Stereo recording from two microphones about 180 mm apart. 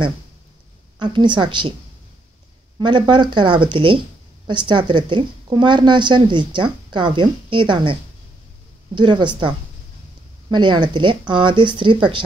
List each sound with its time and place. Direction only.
0.9 s a woman's voice: 25° right (ahead or behind)
2.8 s a woman's voice: 25° right (ahead or behind)
10.5 s a woman's voice: 25° right (ahead or behind)